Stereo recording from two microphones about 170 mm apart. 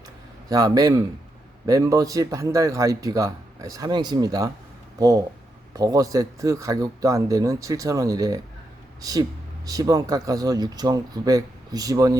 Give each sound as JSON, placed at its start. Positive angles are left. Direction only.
{"t": 0.4, "sound": "a man's voice", "side_deg": -20}